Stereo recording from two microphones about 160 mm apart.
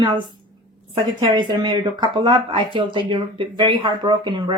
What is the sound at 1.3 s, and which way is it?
Speech, 25° right (ahead or behind).